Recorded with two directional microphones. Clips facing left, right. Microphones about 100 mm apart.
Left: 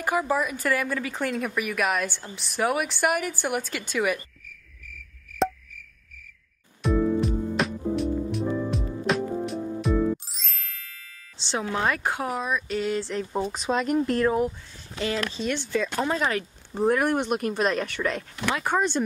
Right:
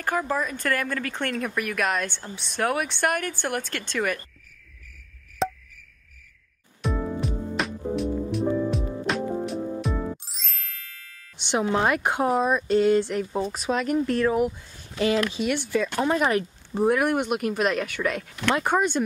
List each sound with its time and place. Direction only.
0.0 s speech: 10° left (ahead or behind)
6.8 s music: centre (ahead or behind)
11.3 s speech: 20° right (ahead or behind)
13.1 s speech: 5° right (ahead or behind)
15.0 s speech: 15° right (ahead or behind)
16.8 s speech: 5° right (ahead or behind)
18.5 s speech: 20° right (ahead or behind)
18.8 s speech: 5° right (ahead or behind)